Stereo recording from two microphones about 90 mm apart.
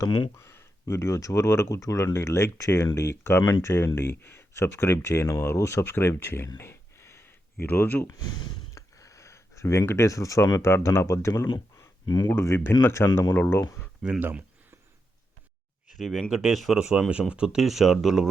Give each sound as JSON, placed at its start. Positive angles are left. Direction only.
{"t": 0.3, "sound": "speech", "side_deg": 30}
{"t": 6.6, "sound": "a sound", "side_deg": 30}
{"t": 8.7, "sound": "a sound", "side_deg": 35}
{"t": 10.5, "sound": "speech", "side_deg": 30}
{"t": 12.0, "sound": "speech", "side_deg": 50}
{"t": 12.3, "sound": "speech", "side_deg": 25}
{"t": 14.0, "sound": "speech", "side_deg": -10}
{"t": 14.3, "sound": "a sound", "side_deg": -25}
{"t": 16.0, "sound": "speech", "side_deg": 0}